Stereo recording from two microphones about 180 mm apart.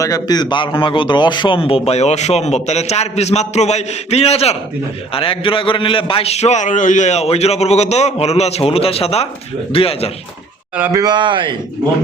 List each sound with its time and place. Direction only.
0.0 s a man's voice: 20° left (ahead or behind)
10.8 s speech: 10° right (ahead or behind)
11.0 s speech: 25° right (ahead or behind)